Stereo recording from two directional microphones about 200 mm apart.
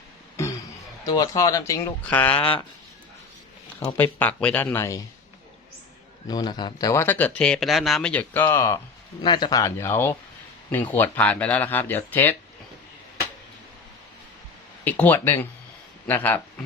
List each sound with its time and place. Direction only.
1.0 s speech: 20° left (ahead or behind)
2.4 s speech: 25° left (ahead or behind)
3.8 s speech: 10° left (ahead or behind)
6.2 s speech: 20° left (ahead or behind)
14.8 s speech: 10° left (ahead or behind)